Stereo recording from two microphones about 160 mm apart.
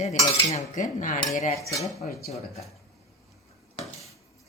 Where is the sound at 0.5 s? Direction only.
50° left (ahead or behind).